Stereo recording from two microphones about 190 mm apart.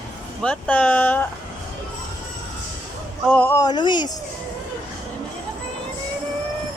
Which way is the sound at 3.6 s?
20° left (ahead or behind).